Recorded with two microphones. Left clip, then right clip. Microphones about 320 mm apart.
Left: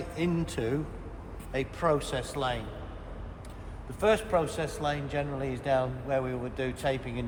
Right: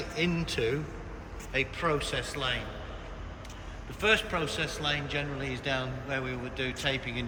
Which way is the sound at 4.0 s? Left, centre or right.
Centre.